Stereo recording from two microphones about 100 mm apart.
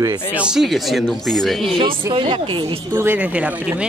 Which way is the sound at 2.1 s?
60° right (ahead or behind).